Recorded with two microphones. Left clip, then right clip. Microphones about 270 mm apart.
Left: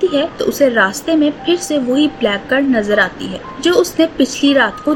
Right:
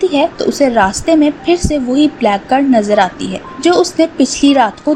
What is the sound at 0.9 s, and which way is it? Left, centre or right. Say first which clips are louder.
A woman's voice: right 4 dB; centre.